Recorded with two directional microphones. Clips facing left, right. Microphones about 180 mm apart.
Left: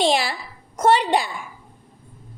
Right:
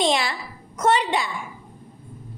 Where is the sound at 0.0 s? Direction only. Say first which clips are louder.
Left 2 dB; 35° left (ahead or behind).